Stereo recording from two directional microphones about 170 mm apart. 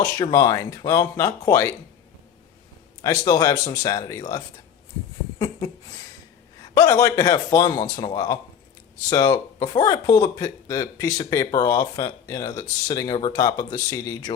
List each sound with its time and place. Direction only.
0.0 s speech: 20° left (ahead or behind)
3.0 s speech: 20° left (ahead or behind)
5.4 s a sound: 30° left (ahead or behind)
6.6 s speech: 20° left (ahead or behind)